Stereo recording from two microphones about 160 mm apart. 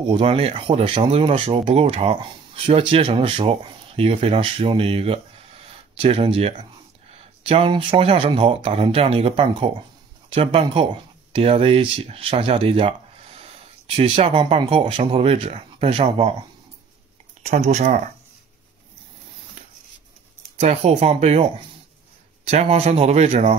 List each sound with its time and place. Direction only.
0.1 s speech: 35° right (ahead or behind)
17.4 s speech: 45° right (ahead or behind)
20.5 s speech: 40° right (ahead or behind)